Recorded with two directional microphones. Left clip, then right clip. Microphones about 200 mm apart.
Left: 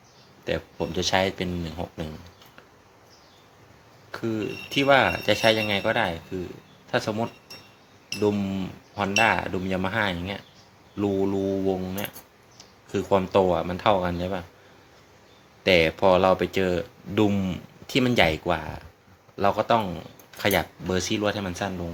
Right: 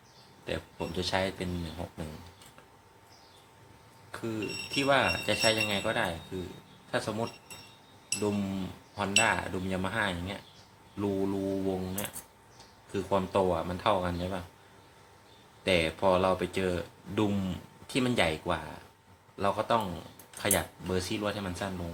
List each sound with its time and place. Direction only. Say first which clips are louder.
0.4 s speech: left 8 dB; 40° left (ahead or behind)
4.1 s speech: left 6 dB; 40° left (ahead or behind)
9.0 s speech: left 5 dB; 40° left (ahead or behind)
15.6 s speech: left 7 dB; 40° left (ahead or behind)